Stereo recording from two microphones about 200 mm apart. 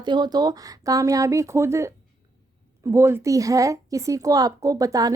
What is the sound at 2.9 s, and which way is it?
Speech, 15° right (ahead or behind).